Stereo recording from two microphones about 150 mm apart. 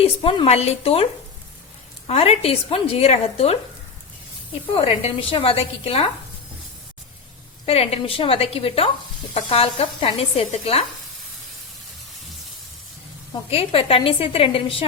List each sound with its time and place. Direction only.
0.0 s a woman's voice: 35° left (ahead or behind)
2.0 s speech: 45° left (ahead or behind)
4.7 s a woman's voice: 40° left (ahead or behind)
7.6 s a woman's voice: 40° left (ahead or behind)
13.5 s a woman's voice: 40° left (ahead or behind)